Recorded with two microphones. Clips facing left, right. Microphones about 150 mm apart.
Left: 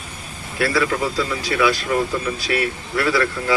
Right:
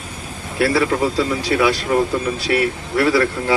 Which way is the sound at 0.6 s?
30° right (ahead or behind).